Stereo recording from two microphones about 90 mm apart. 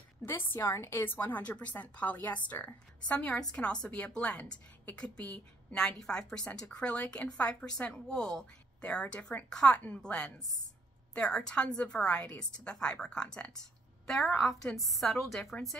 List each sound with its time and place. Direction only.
0.2 s a woman's voice: 25° left (ahead or behind); by 15.5 s centre (ahead or behind)